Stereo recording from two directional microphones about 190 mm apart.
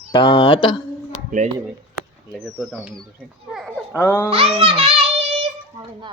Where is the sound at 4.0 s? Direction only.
10° left (ahead or behind).